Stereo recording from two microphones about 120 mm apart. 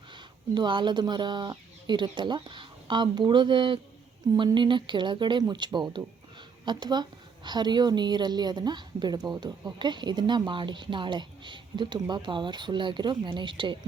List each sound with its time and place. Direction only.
0.1 s a woman's voice: 40° right (ahead or behind)